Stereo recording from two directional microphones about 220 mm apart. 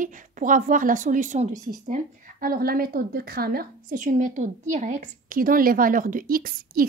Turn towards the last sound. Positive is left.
turn(degrees=-40)  # may be behind; listen again after turning